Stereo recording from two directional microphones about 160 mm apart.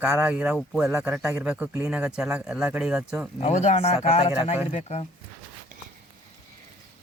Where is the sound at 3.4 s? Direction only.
45° left (ahead or behind).